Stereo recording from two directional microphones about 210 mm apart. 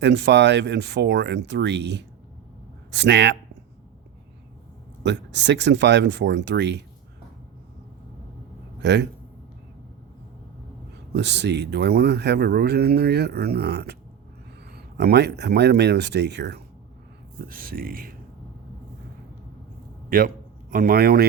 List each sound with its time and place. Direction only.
0.0 s speech: 55° right (ahead or behind)
5.0 s speech: 55° right (ahead or behind)
8.8 s speech: 55° right (ahead or behind)
11.1 s speech: 55° right (ahead or behind)
20.1 s a man's voice: 45° right (ahead or behind)